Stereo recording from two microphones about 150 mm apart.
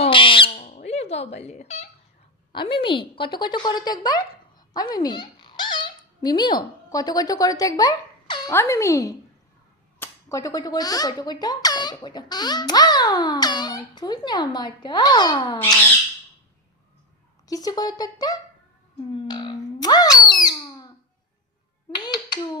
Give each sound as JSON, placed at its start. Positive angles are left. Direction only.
{"t": 0.0, "sound": "owl", "side_deg": 35}
{"t": 0.9, "sound": "a sound", "side_deg": 45}
{"t": 2.5, "sound": "speech", "side_deg": 35}
{"t": 4.7, "sound": "dog", "side_deg": 25}
{"t": 6.2, "sound": "speech", "side_deg": 30}
{"t": 17.4, "sound": "speech", "side_deg": 25}
{"t": 19.3, "sound": "owl", "side_deg": 30}
{"t": 21.9, "sound": "clapping", "side_deg": 30}